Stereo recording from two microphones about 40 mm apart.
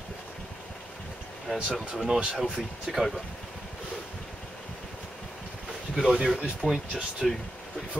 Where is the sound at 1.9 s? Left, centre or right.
Centre.